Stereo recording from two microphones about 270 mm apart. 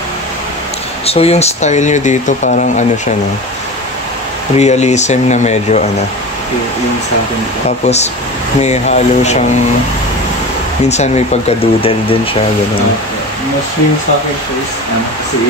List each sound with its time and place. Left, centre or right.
1.0 s speech: left
4.6 s speech: left
7.8 s speech: left
10.9 s speech: left